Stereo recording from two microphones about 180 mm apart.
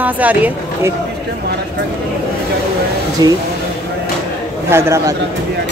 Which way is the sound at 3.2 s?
20° right (ahead or behind).